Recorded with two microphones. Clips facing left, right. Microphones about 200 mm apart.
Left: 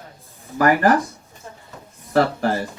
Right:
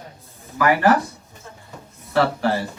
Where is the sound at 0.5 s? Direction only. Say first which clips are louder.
Left 1 dB; 40° left (ahead or behind).